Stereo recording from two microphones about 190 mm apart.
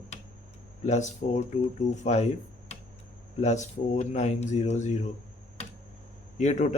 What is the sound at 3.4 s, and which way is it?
Speech, 35° left (ahead or behind).